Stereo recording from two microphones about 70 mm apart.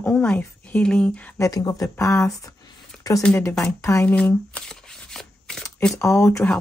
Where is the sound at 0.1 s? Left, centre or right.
Centre.